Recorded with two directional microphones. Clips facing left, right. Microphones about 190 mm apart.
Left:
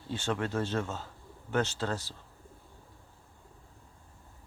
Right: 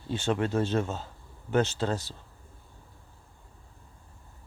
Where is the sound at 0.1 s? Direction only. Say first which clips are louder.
Right 5 dB; 20° right (ahead or behind).